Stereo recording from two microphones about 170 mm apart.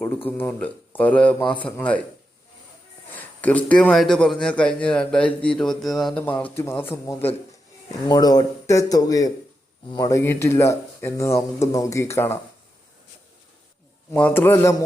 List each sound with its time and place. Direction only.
0.3 s speech: 10° left (ahead or behind)
3.2 s a man's voice: 10° left (ahead or behind)
8.0 s speech: 25° left (ahead or behind)
14.1 s speech: 10° left (ahead or behind)